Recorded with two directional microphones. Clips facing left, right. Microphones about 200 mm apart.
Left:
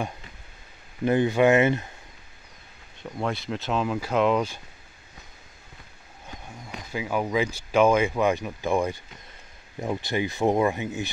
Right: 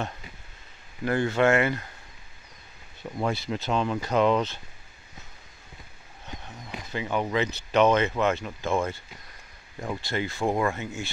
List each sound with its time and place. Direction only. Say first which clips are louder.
1.0 s speech: left 3 dB; 20° left (ahead or behind)
3.0 s speech: right 1 dB; 5° right (ahead or behind)
6.9 s speech: left 1 dB; 5° left (ahead or behind)